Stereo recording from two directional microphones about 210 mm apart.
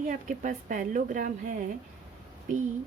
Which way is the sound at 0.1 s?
40° right (ahead or behind).